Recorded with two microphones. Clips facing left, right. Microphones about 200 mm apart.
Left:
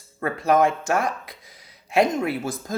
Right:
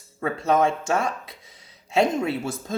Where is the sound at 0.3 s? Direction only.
25° right (ahead or behind).